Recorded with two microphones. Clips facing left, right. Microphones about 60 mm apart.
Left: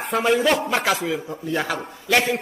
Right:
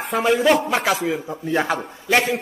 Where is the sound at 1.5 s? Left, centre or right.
Right.